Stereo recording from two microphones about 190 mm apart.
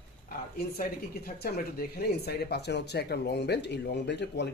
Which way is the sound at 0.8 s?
50° left (ahead or behind).